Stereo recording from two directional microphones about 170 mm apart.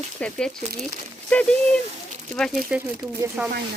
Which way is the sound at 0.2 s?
5° left (ahead or behind).